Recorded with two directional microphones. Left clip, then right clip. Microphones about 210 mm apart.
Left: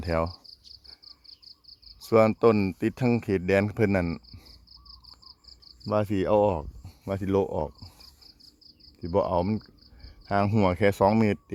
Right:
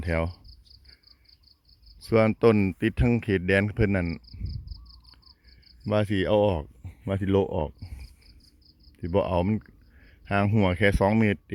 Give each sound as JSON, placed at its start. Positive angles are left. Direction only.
{"t": 0.0, "sound": "cricket", "side_deg": -10}
{"t": 2.0, "sound": "speech", "side_deg": -5}
{"t": 5.8, "sound": "speech", "side_deg": -5}